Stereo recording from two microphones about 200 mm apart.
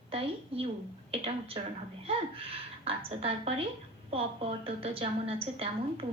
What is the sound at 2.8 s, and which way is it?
A woman's voice, 30° right (ahead or behind).